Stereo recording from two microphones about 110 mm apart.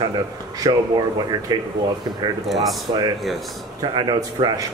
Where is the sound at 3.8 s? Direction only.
40° right (ahead or behind).